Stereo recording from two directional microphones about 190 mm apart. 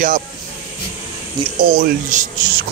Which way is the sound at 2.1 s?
40° right (ahead or behind).